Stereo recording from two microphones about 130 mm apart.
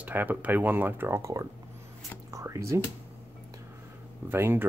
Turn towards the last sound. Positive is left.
turn(degrees=-20)  # may be behind; listen again after turning